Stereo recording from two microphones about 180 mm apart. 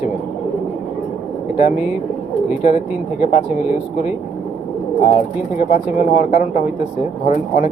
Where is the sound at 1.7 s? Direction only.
5° right (ahead or behind).